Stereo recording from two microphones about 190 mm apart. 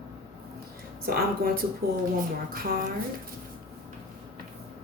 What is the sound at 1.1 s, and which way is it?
Speech, 50° right (ahead or behind).